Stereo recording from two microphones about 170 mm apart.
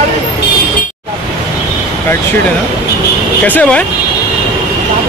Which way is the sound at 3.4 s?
10° left (ahead or behind).